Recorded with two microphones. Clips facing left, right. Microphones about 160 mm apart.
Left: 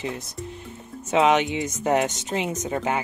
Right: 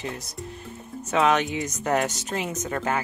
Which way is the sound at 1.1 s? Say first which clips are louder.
Left 2 dB; 20° left (ahead or behind).